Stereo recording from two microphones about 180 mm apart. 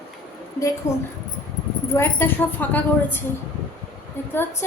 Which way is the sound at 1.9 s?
15° left (ahead or behind).